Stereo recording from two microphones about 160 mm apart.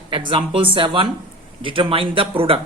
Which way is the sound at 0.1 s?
30° right (ahead or behind).